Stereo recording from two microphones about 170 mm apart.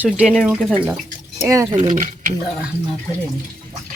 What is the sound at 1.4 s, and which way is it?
Speech, 20° right (ahead or behind).